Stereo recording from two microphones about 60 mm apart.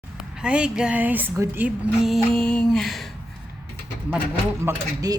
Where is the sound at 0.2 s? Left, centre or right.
Centre.